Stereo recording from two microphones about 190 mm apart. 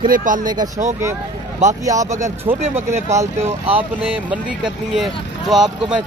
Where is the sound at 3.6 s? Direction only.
30° right (ahead or behind).